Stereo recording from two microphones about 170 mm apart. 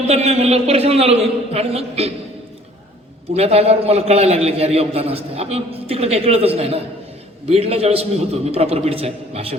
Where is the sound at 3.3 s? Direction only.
35° right (ahead or behind).